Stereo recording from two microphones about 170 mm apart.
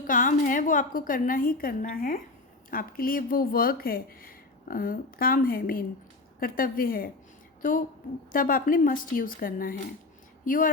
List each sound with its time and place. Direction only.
0.1 s a woman's voice: 50° left (ahead or behind)
8.3 s speech: 55° left (ahead or behind)